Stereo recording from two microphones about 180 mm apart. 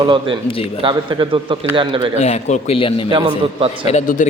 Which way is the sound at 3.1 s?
30° right (ahead or behind).